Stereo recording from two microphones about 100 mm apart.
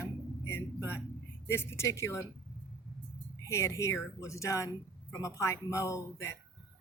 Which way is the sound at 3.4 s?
30° left (ahead or behind).